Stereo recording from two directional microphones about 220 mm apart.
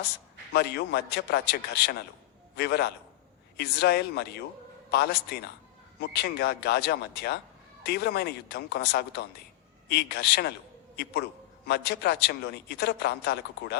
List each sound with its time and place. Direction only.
0.5 s a man's voice: 45° left (ahead or behind)